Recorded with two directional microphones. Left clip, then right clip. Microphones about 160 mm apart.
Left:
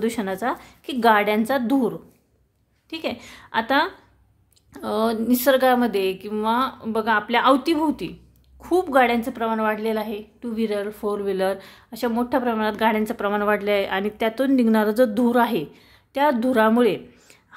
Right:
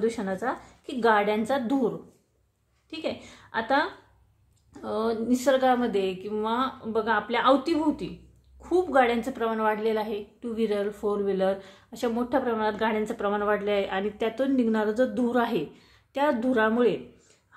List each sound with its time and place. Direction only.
0.0 s a woman's voice: 45° left (ahead or behind)